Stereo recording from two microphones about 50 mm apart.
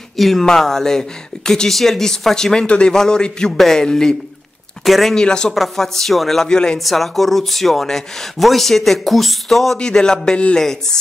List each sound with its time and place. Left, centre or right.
0.2 s speech: centre
2.6 s a man's voice: left
2.9 s speech: centre
4.8 s speech: centre
5.1 s speech: centre
5.5 s speech: centre
6.8 s speech: centre
9.8 s speech: centre